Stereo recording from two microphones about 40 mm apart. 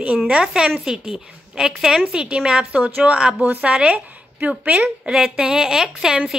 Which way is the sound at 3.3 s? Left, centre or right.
Right.